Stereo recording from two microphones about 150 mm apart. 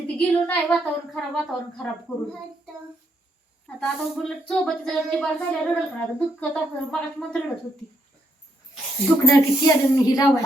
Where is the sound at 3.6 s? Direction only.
5° left (ahead or behind).